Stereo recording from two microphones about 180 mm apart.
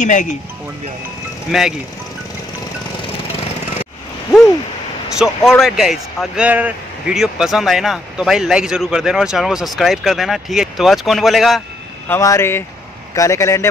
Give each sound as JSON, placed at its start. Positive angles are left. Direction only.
{"t": 0.0, "sound": "speech", "side_deg": 45}
{"t": 1.5, "sound": "speech", "side_deg": 0}
{"t": 5.2, "sound": "speech", "side_deg": 0}
{"t": 12.1, "sound": "a man's voice", "side_deg": 15}